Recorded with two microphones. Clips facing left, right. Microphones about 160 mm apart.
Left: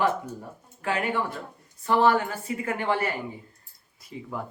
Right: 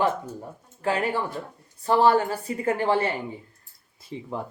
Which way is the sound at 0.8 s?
30° right (ahead or behind).